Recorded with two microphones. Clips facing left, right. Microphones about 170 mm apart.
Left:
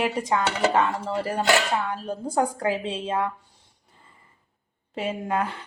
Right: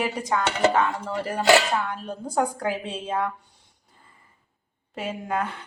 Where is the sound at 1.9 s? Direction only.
30° left (ahead or behind).